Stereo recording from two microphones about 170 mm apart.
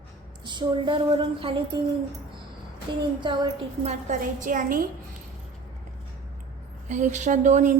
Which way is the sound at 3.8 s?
45° right (ahead or behind).